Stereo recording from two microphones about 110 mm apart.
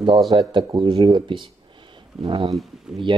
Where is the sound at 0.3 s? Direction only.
50° right (ahead or behind).